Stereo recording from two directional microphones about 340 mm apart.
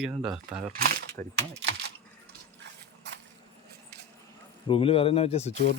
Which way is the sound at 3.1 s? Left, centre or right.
Right.